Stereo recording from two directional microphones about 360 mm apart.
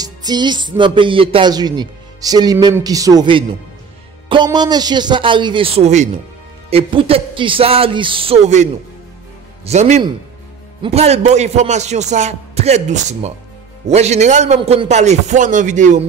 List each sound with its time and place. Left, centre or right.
0.0 s speech: centre
9.7 s a man's voice: centre